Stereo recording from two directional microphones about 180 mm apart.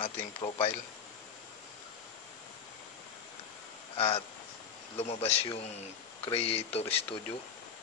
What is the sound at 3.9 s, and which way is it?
A man's voice, 35° left (ahead or behind).